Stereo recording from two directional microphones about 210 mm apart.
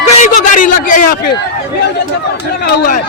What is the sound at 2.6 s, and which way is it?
Speech, 40° left (ahead or behind).